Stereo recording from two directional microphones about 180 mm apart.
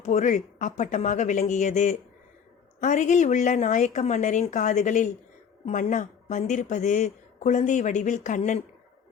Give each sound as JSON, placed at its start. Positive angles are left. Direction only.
{"t": 0.0, "sound": "speech", "side_deg": 40}